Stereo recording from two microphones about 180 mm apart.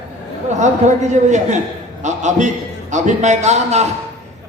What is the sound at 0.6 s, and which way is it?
Speech, 40° right (ahead or behind).